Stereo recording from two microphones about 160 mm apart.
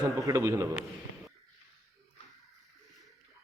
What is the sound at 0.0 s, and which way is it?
Speech, 20° right (ahead or behind).